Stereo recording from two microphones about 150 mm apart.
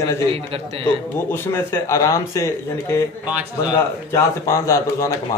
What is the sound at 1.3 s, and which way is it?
A man's voice, 15° left (ahead or behind).